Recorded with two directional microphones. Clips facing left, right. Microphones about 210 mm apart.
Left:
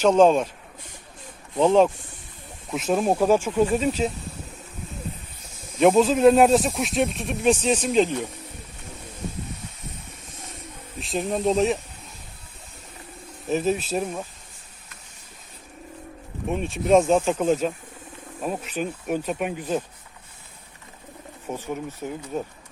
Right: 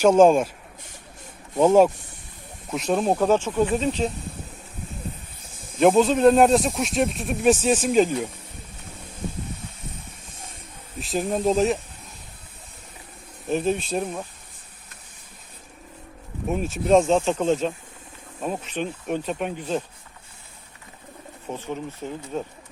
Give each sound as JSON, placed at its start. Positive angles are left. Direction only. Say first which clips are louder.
{"t": 0.0, "sound": "speech", "louder": "right 2 dB", "side_deg": -10}
{"t": 1.5, "sound": "speech", "louder": "right 2 dB", "side_deg": -10}
{"t": 5.8, "sound": "speech", "louder": "even", "side_deg": 0}
{"t": 11.0, "sound": "speech", "louder": "right 1 dB", "side_deg": 0}
{"t": 13.5, "sound": "speech", "louder": "even", "side_deg": 5}
{"t": 16.5, "sound": "speech", "louder": "even", "side_deg": -5}
{"t": 21.4, "sound": "speech", "louder": "left 1 dB", "side_deg": 10}